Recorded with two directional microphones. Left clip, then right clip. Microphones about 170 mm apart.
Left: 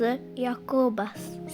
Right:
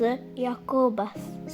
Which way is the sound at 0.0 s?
25° left (ahead or behind).